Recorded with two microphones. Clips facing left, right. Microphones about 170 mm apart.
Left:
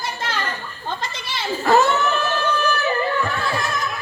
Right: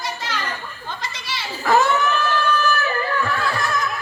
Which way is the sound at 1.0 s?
55° left (ahead or behind).